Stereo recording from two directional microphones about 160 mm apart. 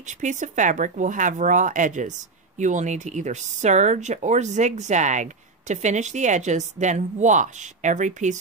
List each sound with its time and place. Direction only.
0.0 s speech: 50° right (ahead or behind)